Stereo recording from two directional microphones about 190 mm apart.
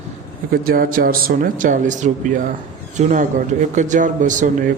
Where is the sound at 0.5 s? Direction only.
50° right (ahead or behind).